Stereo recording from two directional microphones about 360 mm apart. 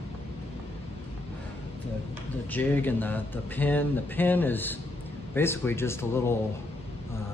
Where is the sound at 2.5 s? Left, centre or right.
Centre.